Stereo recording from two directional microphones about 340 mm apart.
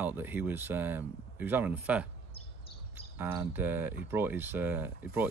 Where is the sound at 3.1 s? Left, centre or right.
Centre.